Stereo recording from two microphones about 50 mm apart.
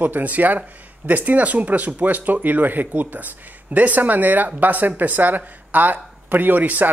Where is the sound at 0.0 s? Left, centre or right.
Right.